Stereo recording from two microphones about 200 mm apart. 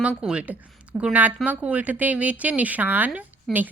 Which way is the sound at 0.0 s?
5° right (ahead or behind).